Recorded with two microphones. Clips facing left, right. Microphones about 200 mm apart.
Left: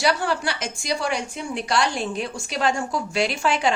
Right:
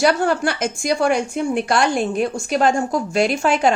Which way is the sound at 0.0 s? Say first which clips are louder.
Right 6 dB; 50° right (ahead or behind).